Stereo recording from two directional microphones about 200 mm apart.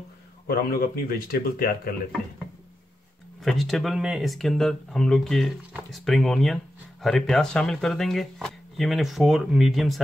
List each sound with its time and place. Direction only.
0.5 s speech: 50° left (ahead or behind)
3.4 s speech: centre (ahead or behind)